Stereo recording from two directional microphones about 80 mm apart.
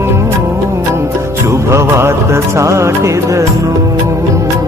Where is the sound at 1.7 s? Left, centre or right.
Right.